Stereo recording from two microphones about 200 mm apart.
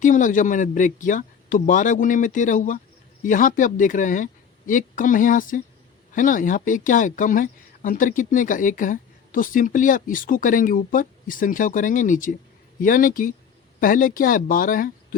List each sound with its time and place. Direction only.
0.0 s speech: 40° left (ahead or behind)